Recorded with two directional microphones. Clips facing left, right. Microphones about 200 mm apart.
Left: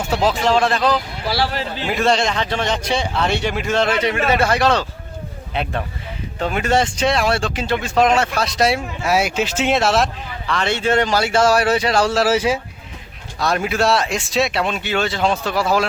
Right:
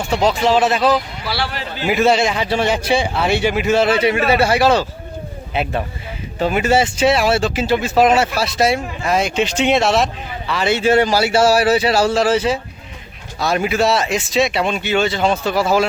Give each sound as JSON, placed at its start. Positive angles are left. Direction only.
{"t": 0.0, "sound": "speech", "side_deg": 5}
{"t": 1.2, "sound": "a man's voice", "side_deg": 45}
{"t": 1.8, "sound": "a man's voice", "side_deg": -5}